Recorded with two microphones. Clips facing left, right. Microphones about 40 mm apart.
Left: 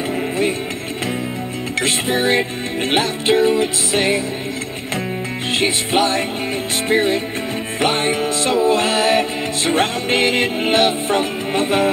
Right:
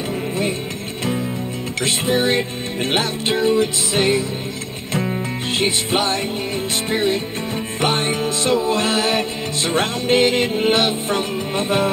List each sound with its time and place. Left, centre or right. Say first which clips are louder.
1.8 s music: even; centre
7.8 s music: left 2 dB; centre